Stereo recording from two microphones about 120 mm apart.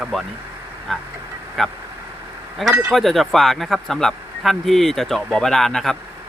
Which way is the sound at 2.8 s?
Centre (ahead or behind).